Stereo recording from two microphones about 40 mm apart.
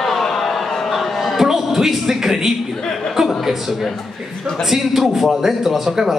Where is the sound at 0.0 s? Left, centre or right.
Centre.